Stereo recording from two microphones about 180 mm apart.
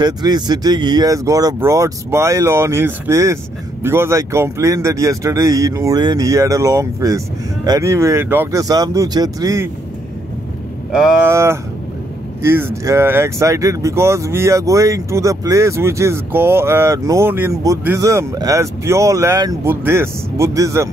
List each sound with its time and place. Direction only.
0.0 s speech: 20° right (ahead or behind)
10.9 s speech: 5° right (ahead or behind)
11.2 s speech: 15° right (ahead or behind)